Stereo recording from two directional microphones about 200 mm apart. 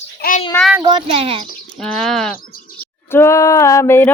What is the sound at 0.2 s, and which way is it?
Speech, 45° left (ahead or behind).